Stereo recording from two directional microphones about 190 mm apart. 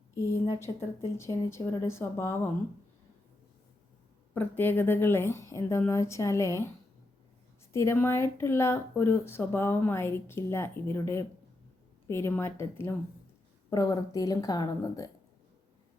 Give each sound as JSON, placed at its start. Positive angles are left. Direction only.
{"t": 0.3, "sound": "speech", "side_deg": 15}
{"t": 4.4, "sound": "speech", "side_deg": 10}
{"t": 7.7, "sound": "a woman's voice", "side_deg": 15}